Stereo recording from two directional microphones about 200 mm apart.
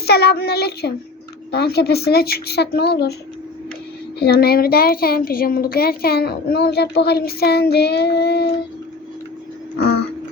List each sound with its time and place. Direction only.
0.0 s a child's voice: 50° left (ahead or behind)
4.2 s a child's voice: 50° left (ahead or behind)
9.7 s a sound: 50° left (ahead or behind)